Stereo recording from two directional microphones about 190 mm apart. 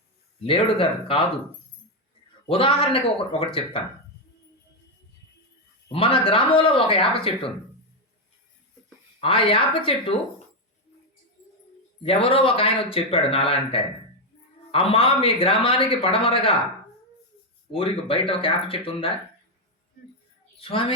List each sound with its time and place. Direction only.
0.4 s speech: 30° left (ahead or behind)
2.5 s speech: 30° left (ahead or behind)
5.9 s speech: 30° left (ahead or behind)
9.2 s speech: 30° left (ahead or behind)
12.0 s speech: 30° left (ahead or behind)
17.7 s speech: 30° left (ahead or behind)
20.6 s a woman's voice: 30° left (ahead or behind)